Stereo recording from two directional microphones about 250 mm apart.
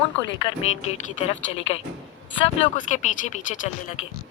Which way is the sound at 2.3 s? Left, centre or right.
Left.